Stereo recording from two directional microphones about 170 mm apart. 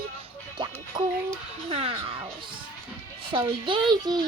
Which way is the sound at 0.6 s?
25° right (ahead or behind).